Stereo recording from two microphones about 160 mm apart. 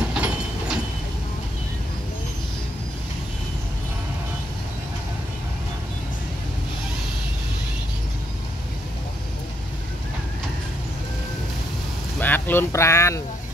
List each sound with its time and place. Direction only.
0.1 s train: 5° right (ahead or behind)
12.2 s speech: 10° left (ahead or behind)